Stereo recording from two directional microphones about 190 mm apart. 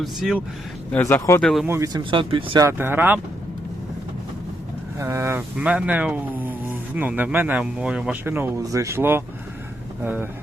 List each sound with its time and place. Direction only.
0.0 s speech: centre (ahead or behind)
0.9 s speech: 10° left (ahead or behind)
1.6 s speech: 15° right (ahead or behind)
2.6 s speech: 10° right (ahead or behind)
4.9 s speech: 15° right (ahead or behind)